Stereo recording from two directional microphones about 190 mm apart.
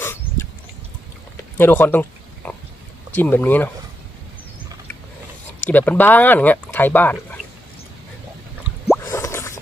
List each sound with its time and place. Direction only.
0.0 s a sound: 15° left (ahead or behind)
1.5 s oink: 10° left (ahead or behind)
3.2 s speech: 10° left (ahead or behind)
5.6 s speech: 10° left (ahead or behind)
9.0 s drip: 15° left (ahead or behind)